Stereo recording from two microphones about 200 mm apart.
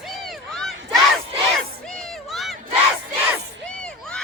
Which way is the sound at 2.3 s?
Centre (ahead or behind).